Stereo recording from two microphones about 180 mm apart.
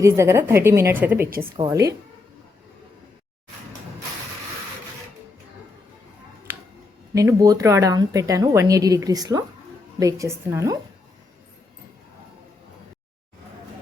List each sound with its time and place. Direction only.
0.0 s speech: 15° right (ahead or behind)
7.1 s speech: 15° right (ahead or behind)